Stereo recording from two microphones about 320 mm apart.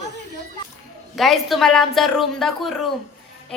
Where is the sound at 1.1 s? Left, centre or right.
Centre.